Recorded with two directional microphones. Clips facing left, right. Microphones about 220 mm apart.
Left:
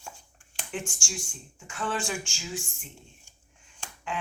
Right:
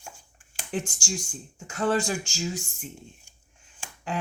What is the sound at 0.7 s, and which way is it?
Speech, 40° right (ahead or behind).